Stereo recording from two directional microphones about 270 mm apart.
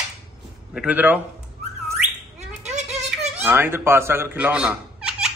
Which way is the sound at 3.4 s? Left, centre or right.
Centre.